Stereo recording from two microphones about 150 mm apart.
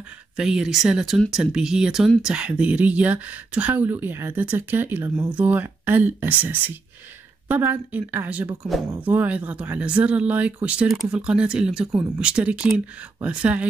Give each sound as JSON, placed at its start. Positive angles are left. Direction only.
{"t": 0.4, "sound": "speech", "side_deg": -5}